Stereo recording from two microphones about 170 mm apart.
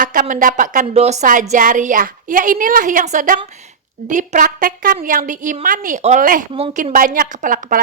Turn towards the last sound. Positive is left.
turn(degrees=-50)  # may be behind; listen again after turning